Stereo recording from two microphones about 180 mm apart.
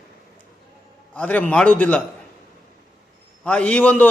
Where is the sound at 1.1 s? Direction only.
10° left (ahead or behind).